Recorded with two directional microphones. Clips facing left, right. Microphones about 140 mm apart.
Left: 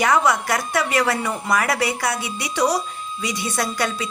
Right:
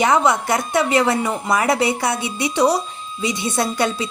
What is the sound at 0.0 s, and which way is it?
A woman's voice, 25° right (ahead or behind).